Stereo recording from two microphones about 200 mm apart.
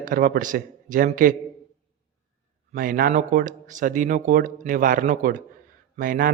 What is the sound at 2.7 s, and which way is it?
A man's voice, 45° right (ahead or behind).